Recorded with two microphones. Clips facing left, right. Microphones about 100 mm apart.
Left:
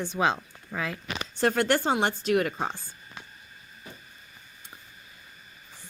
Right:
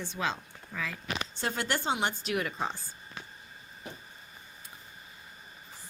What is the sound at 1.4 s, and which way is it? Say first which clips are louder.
A woman's voice: left 8 dB; 50° left (ahead or behind).